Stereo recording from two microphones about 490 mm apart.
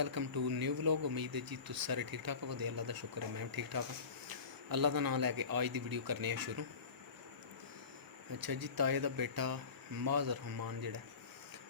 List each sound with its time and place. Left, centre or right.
0.0 s speech: right
8.3 s speech: right